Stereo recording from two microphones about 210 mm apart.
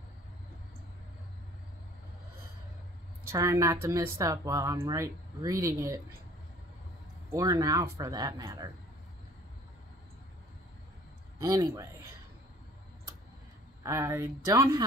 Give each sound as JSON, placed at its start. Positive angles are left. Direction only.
{"t": 3.3, "sound": "speech", "side_deg": -15}
{"t": 7.2, "sound": "speech", "side_deg": -15}
{"t": 11.4, "sound": "speech", "side_deg": -15}
{"t": 13.8, "sound": "speech", "side_deg": -15}